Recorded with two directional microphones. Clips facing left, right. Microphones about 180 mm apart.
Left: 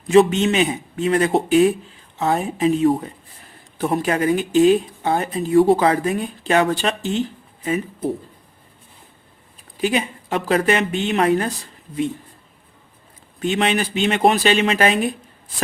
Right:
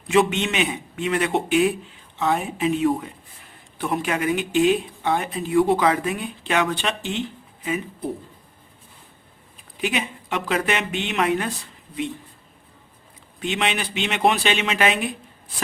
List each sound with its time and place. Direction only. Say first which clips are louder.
0.1 s speech: left 6 dB; 35° left (ahead or behind)
9.8 s speech: left 5 dB; 40° left (ahead or behind)
13.4 s speech: left 5 dB; 45° left (ahead or behind)